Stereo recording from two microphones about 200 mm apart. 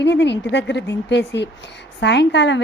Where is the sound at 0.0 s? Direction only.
60° left (ahead or behind).